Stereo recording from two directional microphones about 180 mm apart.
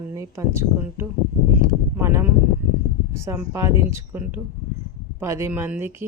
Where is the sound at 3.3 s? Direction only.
15° right (ahead or behind).